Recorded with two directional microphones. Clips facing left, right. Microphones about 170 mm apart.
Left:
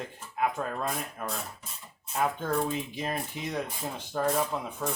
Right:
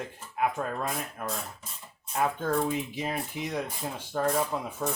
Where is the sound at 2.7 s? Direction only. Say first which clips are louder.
Right 1 dB; 10° right (ahead or behind).